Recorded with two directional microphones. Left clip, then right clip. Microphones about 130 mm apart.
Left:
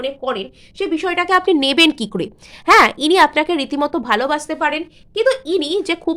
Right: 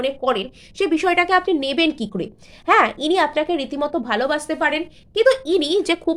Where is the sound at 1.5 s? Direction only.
45° left (ahead or behind).